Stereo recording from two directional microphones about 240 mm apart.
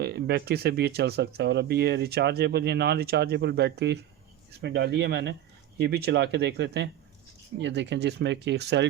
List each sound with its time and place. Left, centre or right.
0.0 s speech: right